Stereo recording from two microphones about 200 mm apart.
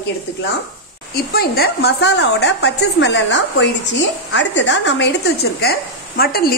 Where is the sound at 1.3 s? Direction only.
50° left (ahead or behind).